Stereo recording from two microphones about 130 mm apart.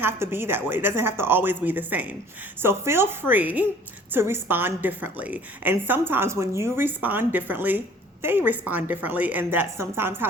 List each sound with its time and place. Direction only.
0.0 s a woman's voice: 15° right (ahead or behind)